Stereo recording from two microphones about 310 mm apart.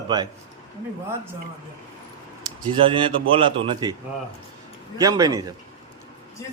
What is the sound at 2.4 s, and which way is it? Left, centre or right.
A man's voice, centre.